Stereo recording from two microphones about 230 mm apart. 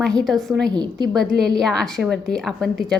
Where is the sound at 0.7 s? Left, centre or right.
Centre.